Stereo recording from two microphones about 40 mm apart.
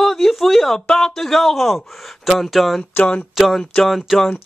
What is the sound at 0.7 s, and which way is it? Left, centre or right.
Speech, centre.